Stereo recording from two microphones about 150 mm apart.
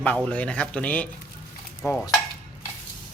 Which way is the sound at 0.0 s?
10° left (ahead or behind).